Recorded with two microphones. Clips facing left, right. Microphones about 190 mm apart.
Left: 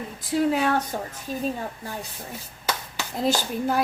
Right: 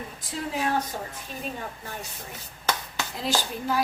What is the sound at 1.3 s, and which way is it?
Speech, 40° left (ahead or behind).